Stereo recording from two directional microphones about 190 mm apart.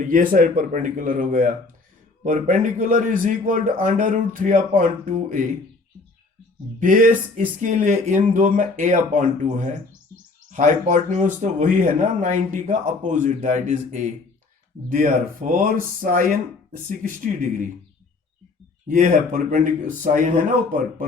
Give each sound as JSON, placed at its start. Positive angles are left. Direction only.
{"t": 0.0, "sound": "a man's voice", "side_deg": -45}
{"t": 6.7, "sound": "a man's voice", "side_deg": -45}
{"t": 18.9, "sound": "speech", "side_deg": -40}